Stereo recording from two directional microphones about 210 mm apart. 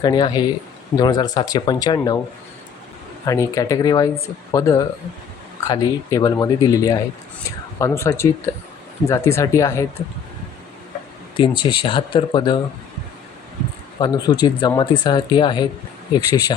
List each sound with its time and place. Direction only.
0.0 s speech: 20° left (ahead or behind)
3.2 s speech: 15° left (ahead or behind)
11.3 s speech: 20° left (ahead or behind)
14.0 s speech: 20° left (ahead or behind)